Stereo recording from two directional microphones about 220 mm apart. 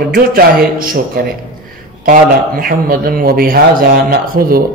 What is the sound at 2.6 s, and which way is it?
Speech, 40° right (ahead or behind).